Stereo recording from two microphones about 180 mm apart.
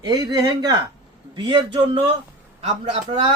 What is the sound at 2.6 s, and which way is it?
Speech, 35° right (ahead or behind).